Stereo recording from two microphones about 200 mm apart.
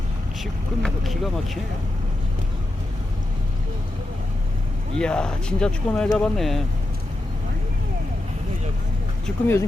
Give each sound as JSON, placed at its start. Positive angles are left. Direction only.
{"t": 0.8, "sound": "speech", "side_deg": 0}
{"t": 4.9, "sound": "speech", "side_deg": 5}
{"t": 9.2, "sound": "speech", "side_deg": 10}